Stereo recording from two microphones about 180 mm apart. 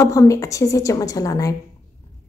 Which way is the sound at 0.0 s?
15° left (ahead or behind).